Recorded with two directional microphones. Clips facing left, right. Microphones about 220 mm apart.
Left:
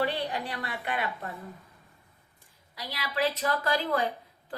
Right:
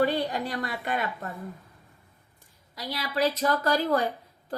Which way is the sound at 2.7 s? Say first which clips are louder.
Right 3 dB; 40° right (ahead or behind).